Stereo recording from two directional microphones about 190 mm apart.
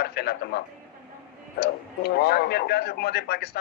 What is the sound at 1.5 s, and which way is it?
A man's voice, 55° left (ahead or behind).